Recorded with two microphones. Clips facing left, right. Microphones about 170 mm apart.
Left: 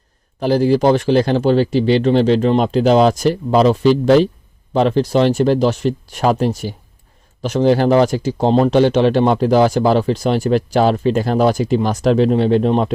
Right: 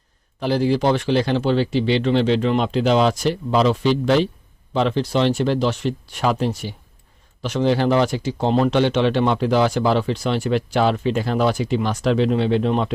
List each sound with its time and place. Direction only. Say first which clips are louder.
0.3 s speech: left 5 dB; 40° left (ahead or behind)